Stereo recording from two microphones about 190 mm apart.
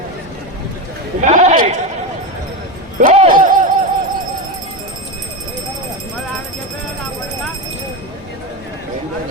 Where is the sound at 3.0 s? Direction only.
40° right (ahead or behind).